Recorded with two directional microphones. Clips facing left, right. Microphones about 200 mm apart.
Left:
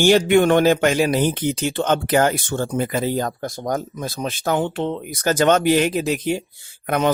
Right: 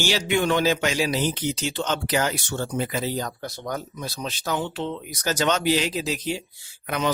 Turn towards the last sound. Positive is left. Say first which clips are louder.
# left 6 dB
turn(degrees=55)  # may be behind; listen again after turning